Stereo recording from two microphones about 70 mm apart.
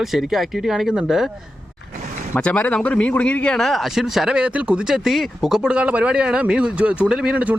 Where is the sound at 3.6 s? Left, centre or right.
Centre.